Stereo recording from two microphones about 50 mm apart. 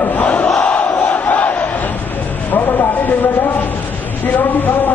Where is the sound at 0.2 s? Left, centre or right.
Left.